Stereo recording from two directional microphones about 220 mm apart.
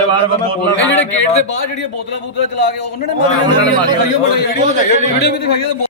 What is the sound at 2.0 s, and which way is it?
A man's voice, 50° left (ahead or behind).